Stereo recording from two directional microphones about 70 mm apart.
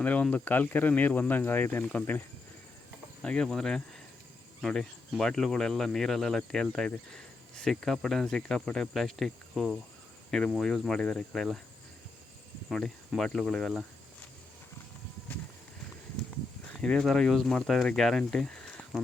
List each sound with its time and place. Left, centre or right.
0.0 s speech: left
3.2 s cricket: centre
13.1 s cricket: centre
16.7 s speech: centre